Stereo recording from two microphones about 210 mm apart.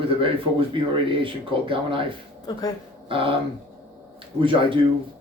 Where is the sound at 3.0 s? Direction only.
25° right (ahead or behind).